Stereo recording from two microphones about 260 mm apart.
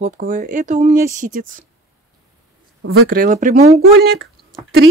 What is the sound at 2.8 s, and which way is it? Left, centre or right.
Speech, right.